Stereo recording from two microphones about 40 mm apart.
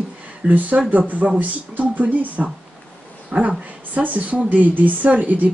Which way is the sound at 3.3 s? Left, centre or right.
Centre.